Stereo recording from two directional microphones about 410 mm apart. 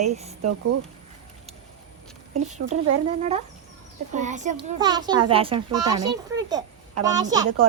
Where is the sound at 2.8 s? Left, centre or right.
Centre.